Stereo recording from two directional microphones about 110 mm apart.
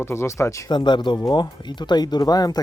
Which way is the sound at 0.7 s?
45° left (ahead or behind).